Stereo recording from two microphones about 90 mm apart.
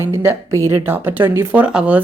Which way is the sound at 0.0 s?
25° right (ahead or behind).